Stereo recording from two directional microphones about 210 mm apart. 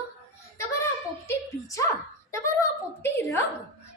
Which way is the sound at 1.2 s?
15° left (ahead or behind).